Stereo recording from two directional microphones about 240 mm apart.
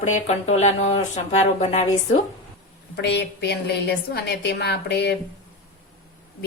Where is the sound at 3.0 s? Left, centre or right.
Left.